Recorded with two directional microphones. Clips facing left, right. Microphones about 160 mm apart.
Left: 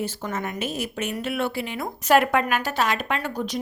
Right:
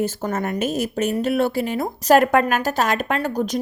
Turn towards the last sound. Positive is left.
turn(degrees=-45)  # may be behind; listen again after turning